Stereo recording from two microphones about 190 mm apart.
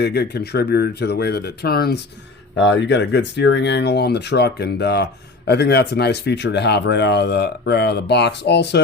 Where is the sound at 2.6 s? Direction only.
70° left (ahead or behind).